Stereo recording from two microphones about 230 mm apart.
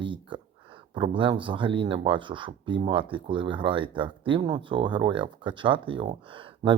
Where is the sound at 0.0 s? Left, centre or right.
Right.